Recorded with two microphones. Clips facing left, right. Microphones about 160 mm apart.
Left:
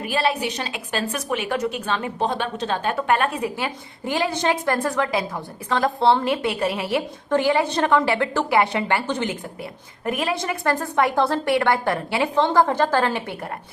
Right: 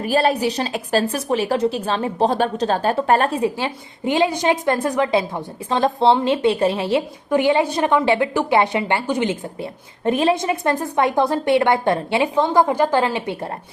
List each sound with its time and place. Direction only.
0.0 s a woman's voice: 40° right (ahead or behind); by 13.3 s 20° right (ahead or behind)